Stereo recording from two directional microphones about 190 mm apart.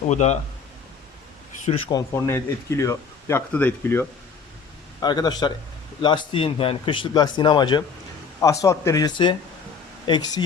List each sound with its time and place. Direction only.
0.1 s speech: 35° left (ahead or behind)
1.9 s speech: 15° left (ahead or behind)
4.9 s speech: 20° left (ahead or behind)